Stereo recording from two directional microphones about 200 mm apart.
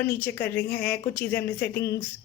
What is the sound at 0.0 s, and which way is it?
A woman's voice, 10° left (ahead or behind).